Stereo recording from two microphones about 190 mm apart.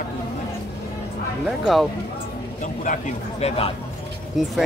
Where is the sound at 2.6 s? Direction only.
40° left (ahead or behind).